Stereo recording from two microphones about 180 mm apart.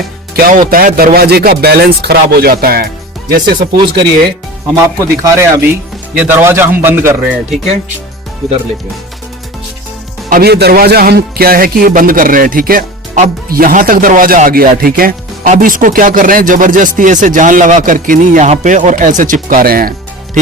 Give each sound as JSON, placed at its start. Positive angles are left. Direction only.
{"t": 0.3, "sound": "speech", "side_deg": -50}
{"t": 4.9, "sound": "speech", "side_deg": -20}
{"t": 8.4, "sound": "speech", "side_deg": 0}
{"t": 10.2, "sound": "speech", "side_deg": -55}